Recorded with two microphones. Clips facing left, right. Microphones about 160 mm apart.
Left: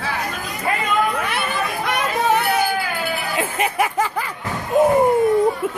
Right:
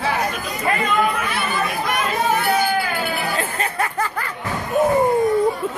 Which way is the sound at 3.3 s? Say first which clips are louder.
Left 3 dB; 10° left (ahead or behind).